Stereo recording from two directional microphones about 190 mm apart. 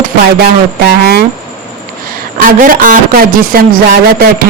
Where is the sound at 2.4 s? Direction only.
45° right (ahead or behind).